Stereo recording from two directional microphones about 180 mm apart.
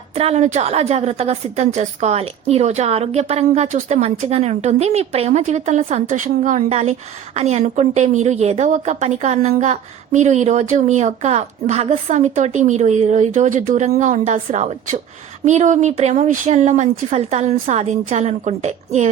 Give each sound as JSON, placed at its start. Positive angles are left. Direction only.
{"t": 0.2, "sound": "a woman's voice", "side_deg": -35}